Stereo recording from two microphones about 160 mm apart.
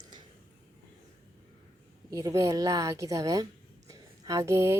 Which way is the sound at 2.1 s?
20° right (ahead or behind).